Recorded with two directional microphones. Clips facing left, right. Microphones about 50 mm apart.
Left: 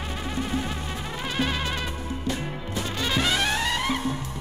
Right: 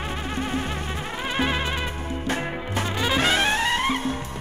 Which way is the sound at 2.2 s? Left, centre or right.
Right.